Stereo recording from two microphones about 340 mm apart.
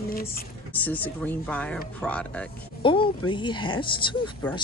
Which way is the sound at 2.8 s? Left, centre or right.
Centre.